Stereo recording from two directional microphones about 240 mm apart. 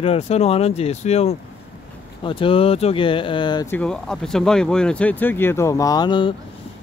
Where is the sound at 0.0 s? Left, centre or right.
Left.